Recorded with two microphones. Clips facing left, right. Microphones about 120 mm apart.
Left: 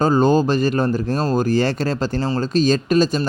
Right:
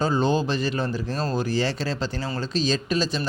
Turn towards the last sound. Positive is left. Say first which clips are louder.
# left 8 dB
turn(degrees=50)  # may be behind; listen again after turning